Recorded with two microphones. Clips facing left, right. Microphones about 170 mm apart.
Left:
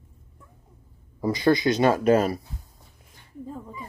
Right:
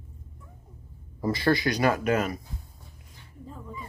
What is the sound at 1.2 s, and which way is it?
Speech, 15° left (ahead or behind).